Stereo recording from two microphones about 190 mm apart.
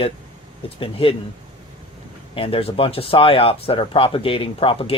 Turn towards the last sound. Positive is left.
turn(degrees=30)  # may be behind; listen again after turning